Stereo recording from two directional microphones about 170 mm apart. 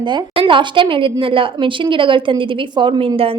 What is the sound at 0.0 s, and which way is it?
A woman's voice, 30° right (ahead or behind).